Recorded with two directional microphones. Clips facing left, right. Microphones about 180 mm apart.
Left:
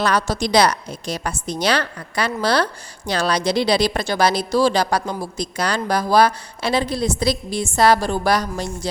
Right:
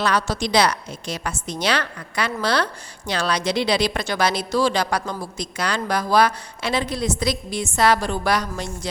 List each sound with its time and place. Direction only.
0.0 s speech: 40° left (ahead or behind)